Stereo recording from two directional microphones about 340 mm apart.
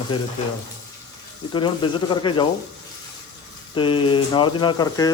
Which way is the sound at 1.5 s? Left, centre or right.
Centre.